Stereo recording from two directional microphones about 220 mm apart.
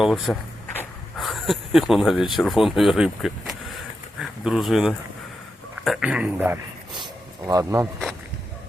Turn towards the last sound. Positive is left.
turn(degrees=-15)  # may be behind; listen again after turning